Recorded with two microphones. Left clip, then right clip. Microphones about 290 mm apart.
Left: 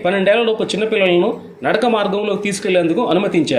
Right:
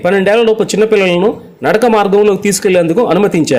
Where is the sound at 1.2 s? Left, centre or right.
Right.